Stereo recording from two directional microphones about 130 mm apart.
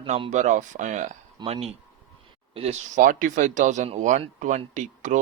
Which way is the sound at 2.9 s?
90° right.